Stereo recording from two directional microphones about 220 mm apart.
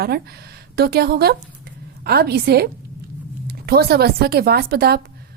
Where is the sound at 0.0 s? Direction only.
45° right (ahead or behind).